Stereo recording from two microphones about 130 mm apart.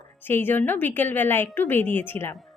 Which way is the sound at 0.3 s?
15° left (ahead or behind).